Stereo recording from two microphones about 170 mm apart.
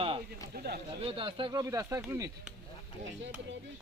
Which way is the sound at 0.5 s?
65° right (ahead or behind).